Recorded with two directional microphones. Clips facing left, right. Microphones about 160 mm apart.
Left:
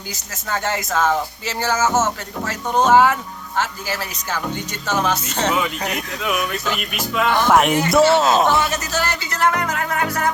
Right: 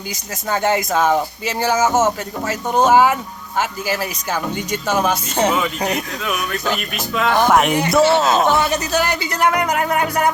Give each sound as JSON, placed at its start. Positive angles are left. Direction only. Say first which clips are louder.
{"t": 0.4, "sound": "speech", "louder": "right 5 dB", "side_deg": -15}
{"t": 6.9, "sound": "speech", "louder": "even", "side_deg": 5}
{"t": 8.7, "sound": "speech", "louder": "right 4 dB", "side_deg": -15}